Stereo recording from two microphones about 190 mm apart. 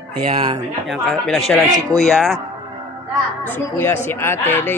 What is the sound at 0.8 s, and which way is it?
Speech, centre (ahead or behind).